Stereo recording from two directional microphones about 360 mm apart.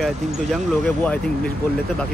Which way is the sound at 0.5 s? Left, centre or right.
Centre.